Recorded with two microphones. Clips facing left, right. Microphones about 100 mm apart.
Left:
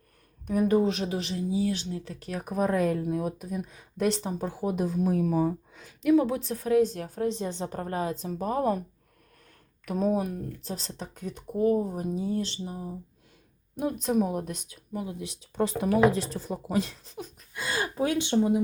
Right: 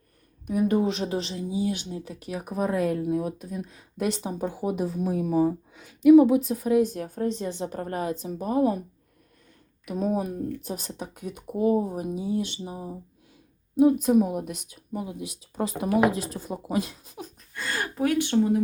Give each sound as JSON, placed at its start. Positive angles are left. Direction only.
{"t": 0.4, "sound": "speech", "side_deg": -5}
{"t": 0.9, "sound": "speech", "side_deg": -30}
{"t": 7.3, "sound": "speech", "side_deg": 20}
{"t": 8.0, "sound": "speech", "side_deg": -15}
{"t": 10.2, "sound": "speech", "side_deg": -20}
{"t": 13.7, "sound": "speech", "side_deg": -5}
{"t": 16.5, "sound": "speech", "side_deg": -20}
{"t": 17.1, "sound": "speech", "side_deg": 0}
{"t": 17.5, "sound": "a sound", "side_deg": 15}